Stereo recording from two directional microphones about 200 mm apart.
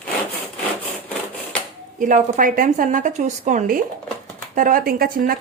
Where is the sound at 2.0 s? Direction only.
40° right (ahead or behind).